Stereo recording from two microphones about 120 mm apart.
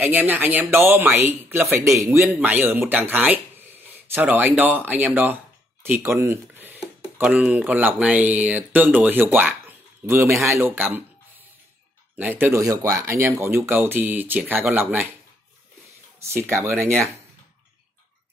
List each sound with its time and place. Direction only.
0.0 s speech: 15° right (ahead or behind)
2.2 s speech: 10° right (ahead or behind)
12.2 s speech: 15° right (ahead or behind)
16.2 s speech: 25° right (ahead or behind)